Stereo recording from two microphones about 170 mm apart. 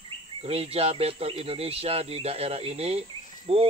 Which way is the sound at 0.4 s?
35° right (ahead or behind).